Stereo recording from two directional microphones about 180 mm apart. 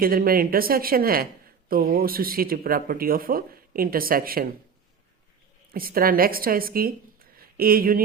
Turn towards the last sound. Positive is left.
turn(degrees=-55)  # may be behind; listen again after turning